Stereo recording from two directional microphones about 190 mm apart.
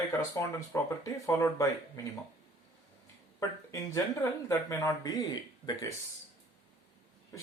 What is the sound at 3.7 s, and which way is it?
Speech, 15° left (ahead or behind).